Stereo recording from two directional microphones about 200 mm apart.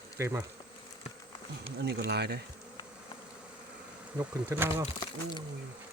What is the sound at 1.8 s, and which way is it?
Speech, 55° right (ahead or behind).